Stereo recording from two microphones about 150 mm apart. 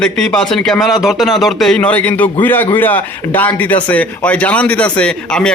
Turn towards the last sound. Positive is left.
turn(degrees=5)  # may be behind; listen again after turning